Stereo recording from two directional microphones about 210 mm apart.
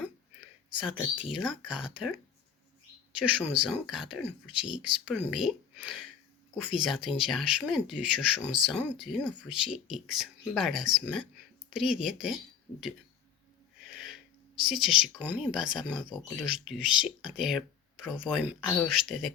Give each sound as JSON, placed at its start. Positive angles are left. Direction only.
{"t": 0.8, "sound": "speech", "side_deg": -5}
{"t": 14.6, "sound": "speech", "side_deg": 0}